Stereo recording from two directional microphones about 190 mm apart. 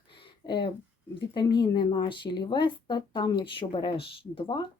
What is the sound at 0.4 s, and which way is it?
A woman's voice, 25° left (ahead or behind).